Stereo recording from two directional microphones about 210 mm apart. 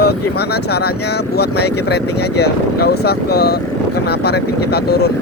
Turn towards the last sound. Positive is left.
turn(degrees=50)  # may be behind; listen again after turning